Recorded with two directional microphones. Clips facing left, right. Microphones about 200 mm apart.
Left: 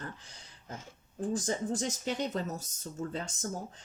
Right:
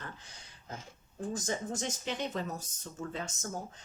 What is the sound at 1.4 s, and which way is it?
Speech, 35° left (ahead or behind).